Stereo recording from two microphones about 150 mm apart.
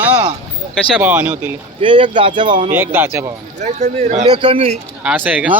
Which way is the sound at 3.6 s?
45° right (ahead or behind).